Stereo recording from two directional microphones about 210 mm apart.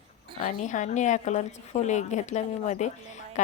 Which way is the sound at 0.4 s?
35° left (ahead or behind).